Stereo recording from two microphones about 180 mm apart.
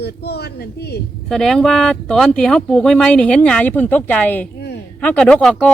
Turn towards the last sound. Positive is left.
turn(degrees=5)  # may be behind; listen again after turning